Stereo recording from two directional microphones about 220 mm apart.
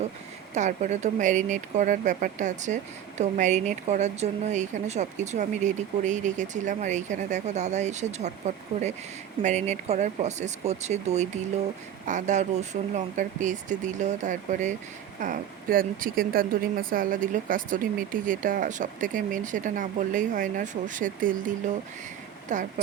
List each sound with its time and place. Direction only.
0.5 s speech: 35° right (ahead or behind)